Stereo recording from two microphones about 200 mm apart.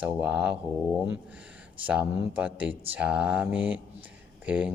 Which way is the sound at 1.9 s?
5° right (ahead or behind).